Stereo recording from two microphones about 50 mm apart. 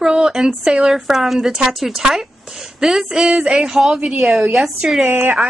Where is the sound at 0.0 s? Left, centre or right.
Centre.